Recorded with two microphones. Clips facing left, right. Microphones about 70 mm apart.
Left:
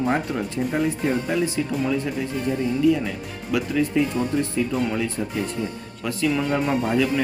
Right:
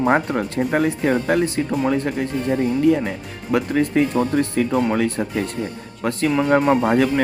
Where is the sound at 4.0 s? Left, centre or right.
Right.